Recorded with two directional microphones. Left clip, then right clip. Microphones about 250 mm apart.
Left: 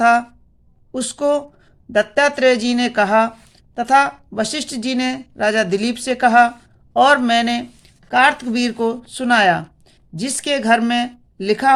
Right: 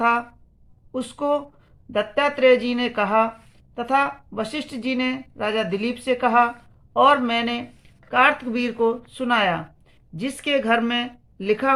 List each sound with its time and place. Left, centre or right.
0.0 s speech: left